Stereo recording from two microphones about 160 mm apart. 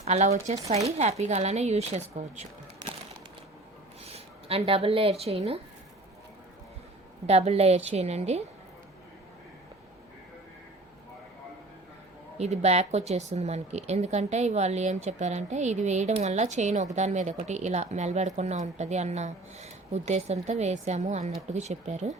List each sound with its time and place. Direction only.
0.0 s a woman's voice: 45° right (ahead or behind)
4.0 s speech: 40° right (ahead or behind)
7.3 s a woman's voice: 40° right (ahead or behind)
12.4 s speech: 45° right (ahead or behind)